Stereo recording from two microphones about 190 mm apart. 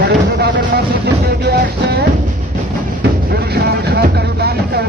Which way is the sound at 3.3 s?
55° right (ahead or behind).